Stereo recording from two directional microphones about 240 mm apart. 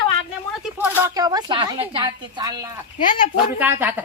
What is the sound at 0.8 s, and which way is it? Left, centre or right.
A woman's voice, centre.